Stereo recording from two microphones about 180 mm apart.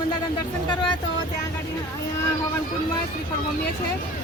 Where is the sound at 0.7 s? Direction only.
25° left (ahead or behind).